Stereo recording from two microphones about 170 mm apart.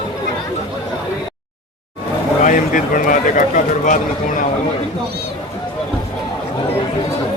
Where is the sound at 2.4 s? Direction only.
50° left (ahead or behind).